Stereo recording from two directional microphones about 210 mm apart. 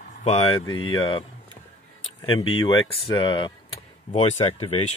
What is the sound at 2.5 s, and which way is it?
Speech, 25° left (ahead or behind).